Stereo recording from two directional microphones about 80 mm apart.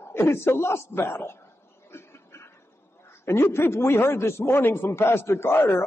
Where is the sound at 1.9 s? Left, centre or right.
Left.